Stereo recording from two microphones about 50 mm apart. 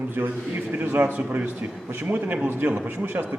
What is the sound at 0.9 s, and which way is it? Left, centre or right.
A man's voice, right.